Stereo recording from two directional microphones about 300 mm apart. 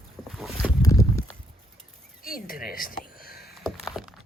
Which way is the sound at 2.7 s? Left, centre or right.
Left.